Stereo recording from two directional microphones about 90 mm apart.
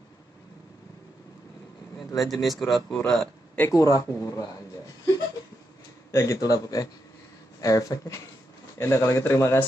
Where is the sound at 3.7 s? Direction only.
40° left (ahead or behind).